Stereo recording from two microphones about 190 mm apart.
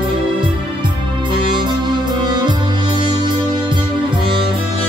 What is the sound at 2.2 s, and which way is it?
Music, 20° right (ahead or behind).